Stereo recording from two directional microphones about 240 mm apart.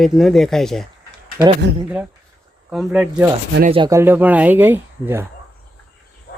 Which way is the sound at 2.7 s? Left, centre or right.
Centre.